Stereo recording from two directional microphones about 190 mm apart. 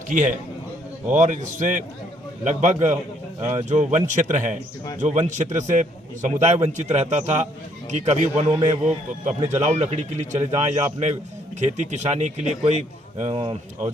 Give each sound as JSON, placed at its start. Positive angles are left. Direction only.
{"t": 0.1, "sound": "speech", "side_deg": -40}